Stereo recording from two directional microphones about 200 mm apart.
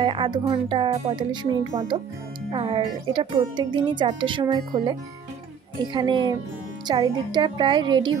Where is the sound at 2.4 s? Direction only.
30° right (ahead or behind).